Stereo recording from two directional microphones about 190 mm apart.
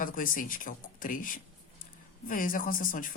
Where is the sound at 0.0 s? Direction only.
45° left (ahead or behind).